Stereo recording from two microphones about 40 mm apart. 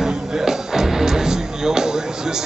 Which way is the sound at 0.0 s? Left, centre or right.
Centre.